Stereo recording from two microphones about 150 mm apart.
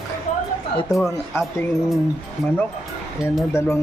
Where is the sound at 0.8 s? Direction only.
Centre (ahead or behind).